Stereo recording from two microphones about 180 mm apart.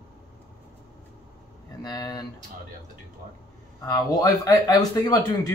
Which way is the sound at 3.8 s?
20° left (ahead or behind).